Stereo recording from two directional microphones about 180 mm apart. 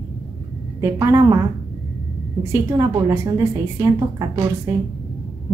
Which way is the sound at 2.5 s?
15° right (ahead or behind).